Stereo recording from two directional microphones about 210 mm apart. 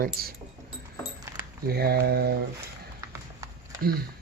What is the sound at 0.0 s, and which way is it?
Mantra, 45° right (ahead or behind).